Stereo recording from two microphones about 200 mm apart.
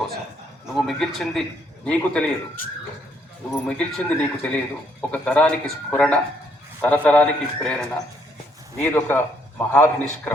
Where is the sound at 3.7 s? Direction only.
5° left (ahead or behind).